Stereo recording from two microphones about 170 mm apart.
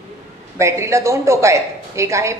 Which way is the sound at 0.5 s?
15° right (ahead or behind).